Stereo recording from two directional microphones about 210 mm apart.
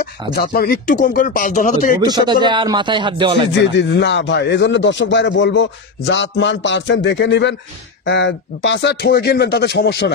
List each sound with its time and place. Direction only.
0.3 s speech: 45° left (ahead or behind)
2.0 s speech: 20° right (ahead or behind)
3.7 s speech: 55° left (ahead or behind)